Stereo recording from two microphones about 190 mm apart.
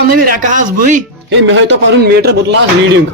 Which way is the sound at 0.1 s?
45° right (ahead or behind).